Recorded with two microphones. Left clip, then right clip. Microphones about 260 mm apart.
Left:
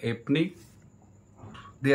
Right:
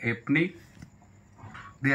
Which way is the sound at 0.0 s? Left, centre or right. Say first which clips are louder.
Right 2 dB; centre.